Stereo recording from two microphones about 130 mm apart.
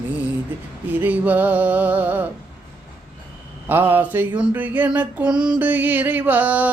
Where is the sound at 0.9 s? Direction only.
10° right (ahead or behind).